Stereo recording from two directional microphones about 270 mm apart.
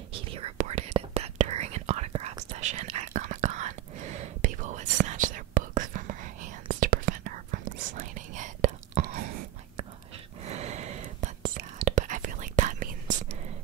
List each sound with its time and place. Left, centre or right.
0.1 s whispering: right
10.4 s whispering: right